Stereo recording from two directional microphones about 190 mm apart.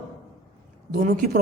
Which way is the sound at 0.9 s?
45° right (ahead or behind).